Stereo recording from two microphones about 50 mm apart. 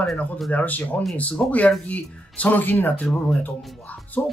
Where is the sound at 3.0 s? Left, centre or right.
Centre.